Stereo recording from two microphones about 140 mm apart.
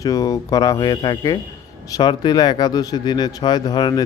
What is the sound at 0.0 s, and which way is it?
Speech, 25° left (ahead or behind).